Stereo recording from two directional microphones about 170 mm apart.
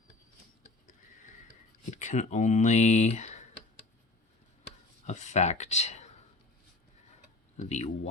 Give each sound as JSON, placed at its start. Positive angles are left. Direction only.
{"t": 1.9, "sound": "speech", "side_deg": 45}
{"t": 5.0, "sound": "speech", "side_deg": 45}
{"t": 7.5, "sound": "speech", "side_deg": 40}